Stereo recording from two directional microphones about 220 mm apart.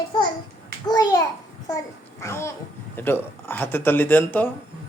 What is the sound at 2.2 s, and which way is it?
Babbling, 10° left (ahead or behind).